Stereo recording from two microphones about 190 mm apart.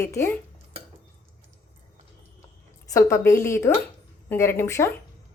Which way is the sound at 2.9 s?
15° left (ahead or behind).